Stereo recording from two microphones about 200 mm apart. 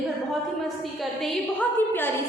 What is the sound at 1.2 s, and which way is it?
Speech, 10° left (ahead or behind).